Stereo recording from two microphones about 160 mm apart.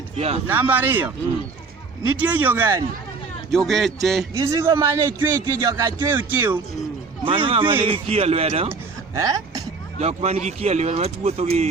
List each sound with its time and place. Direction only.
0.2 s speech: 40° right (ahead or behind)
0.4 s speech: 15° right (ahead or behind)
2.1 s speech: 10° right (ahead or behind)
3.5 s speech: centre (ahead or behind)
4.4 s a man's voice: 20° right (ahead or behind)
7.3 s speech: 35° right (ahead or behind)
8.7 s a sound: 20° right (ahead or behind)
10.0 s speech: 40° right (ahead or behind)